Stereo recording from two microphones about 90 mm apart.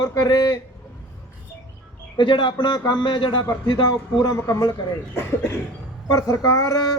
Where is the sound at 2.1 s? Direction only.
65° left (ahead or behind).